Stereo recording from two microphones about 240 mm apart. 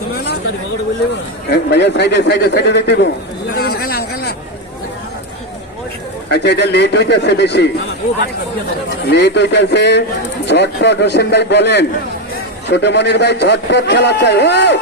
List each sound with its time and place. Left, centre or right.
1.5 s a man's voice: left
3.5 s chatter: left
6.3 s a man's voice: left
9.0 s a man's voice: left